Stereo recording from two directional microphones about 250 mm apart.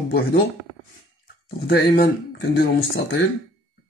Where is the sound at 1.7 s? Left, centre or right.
Left.